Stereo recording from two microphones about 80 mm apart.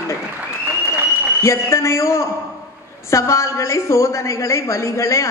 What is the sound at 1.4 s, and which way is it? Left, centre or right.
A woman's voice, left.